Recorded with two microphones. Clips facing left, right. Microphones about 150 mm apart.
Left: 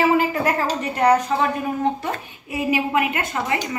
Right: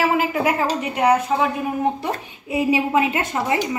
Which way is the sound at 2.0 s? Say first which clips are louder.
Right 2 dB; 20° right (ahead or behind).